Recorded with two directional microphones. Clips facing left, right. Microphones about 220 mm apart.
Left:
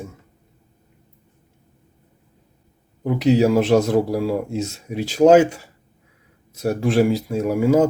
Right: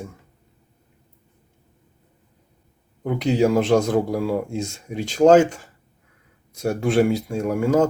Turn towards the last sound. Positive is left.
turn(degrees=5)  # may be behind; listen again after turning